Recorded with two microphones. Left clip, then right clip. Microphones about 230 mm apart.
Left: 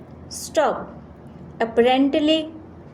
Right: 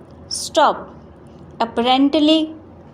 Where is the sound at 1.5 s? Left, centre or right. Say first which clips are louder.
Right 1 dB; centre.